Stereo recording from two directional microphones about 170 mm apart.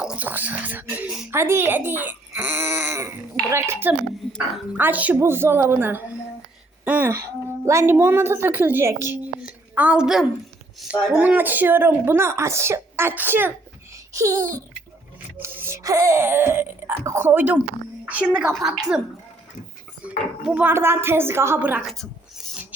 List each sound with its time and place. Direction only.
0.0 s a woman's voice: 10° right (ahead or behind)
4.2 s a sound: centre (ahead or behind)
4.7 s a woman's voice: 10° right (ahead or behind)
20.0 s a woman's voice: 5° right (ahead or behind)
21.8 s speech: centre (ahead or behind)